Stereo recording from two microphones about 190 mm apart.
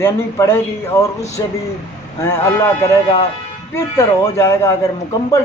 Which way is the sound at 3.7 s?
15° left (ahead or behind).